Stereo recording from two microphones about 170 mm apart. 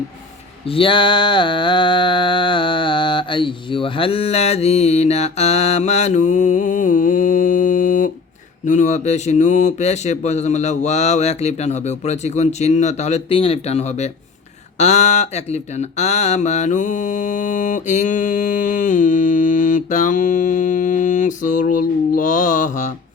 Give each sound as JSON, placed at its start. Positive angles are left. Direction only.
{"t": 0.7, "sound": "mantra", "side_deg": 30}
{"t": 14.8, "sound": "speech", "side_deg": 45}